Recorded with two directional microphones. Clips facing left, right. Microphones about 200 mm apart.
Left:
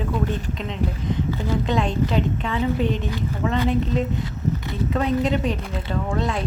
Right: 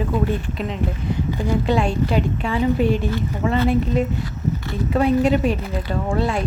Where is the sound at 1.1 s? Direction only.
10° right (ahead or behind).